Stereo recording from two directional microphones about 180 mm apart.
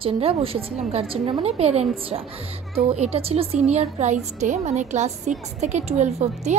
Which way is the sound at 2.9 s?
35° right (ahead or behind).